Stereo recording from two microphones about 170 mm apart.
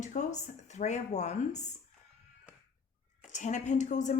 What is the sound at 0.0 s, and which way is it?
A woman's voice, 45° left (ahead or behind).